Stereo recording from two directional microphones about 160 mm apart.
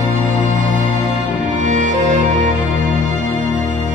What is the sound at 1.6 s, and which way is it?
Music, 50° right (ahead or behind).